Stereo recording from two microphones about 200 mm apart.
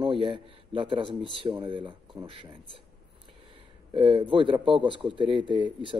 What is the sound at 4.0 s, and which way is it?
Speech, 25° right (ahead or behind).